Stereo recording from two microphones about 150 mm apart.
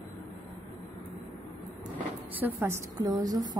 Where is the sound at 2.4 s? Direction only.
10° right (ahead or behind).